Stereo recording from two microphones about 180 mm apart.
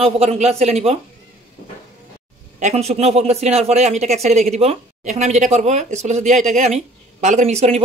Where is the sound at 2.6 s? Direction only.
35° right (ahead or behind).